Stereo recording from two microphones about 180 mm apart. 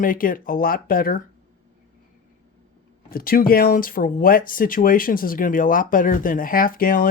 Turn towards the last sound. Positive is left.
turn(degrees=50)  # may be behind; listen again after turning